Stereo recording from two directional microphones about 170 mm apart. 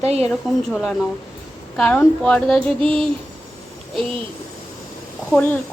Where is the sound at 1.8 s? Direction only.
5° left (ahead or behind).